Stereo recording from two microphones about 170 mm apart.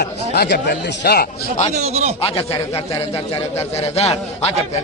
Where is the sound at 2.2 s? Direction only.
35° left (ahead or behind).